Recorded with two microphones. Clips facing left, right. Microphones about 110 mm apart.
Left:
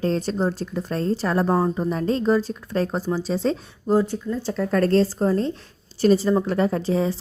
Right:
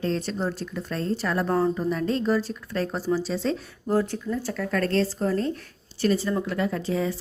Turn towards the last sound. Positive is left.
turn(degrees=30)  # may be behind; listen again after turning